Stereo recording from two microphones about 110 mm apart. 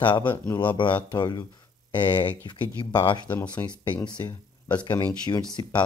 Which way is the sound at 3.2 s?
15° left (ahead or behind).